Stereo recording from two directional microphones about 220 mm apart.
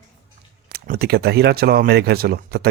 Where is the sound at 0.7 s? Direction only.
45° right (ahead or behind).